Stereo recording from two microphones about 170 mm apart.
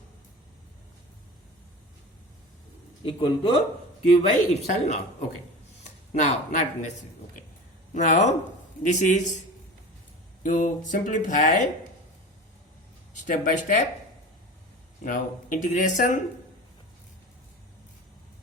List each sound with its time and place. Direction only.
3.0 s speech: 30° left (ahead or behind)
4.1 s speech: 40° left (ahead or behind)
6.1 s speech: 45° left (ahead or behind)
7.9 s speech: 45° left (ahead or behind)
10.4 s speech: 50° left (ahead or behind)
13.2 s speech: 45° left (ahead or behind)
15.0 s speech: 50° left (ahead or behind)